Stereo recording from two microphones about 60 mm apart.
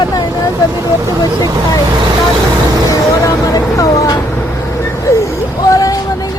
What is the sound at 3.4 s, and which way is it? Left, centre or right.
Speech, left.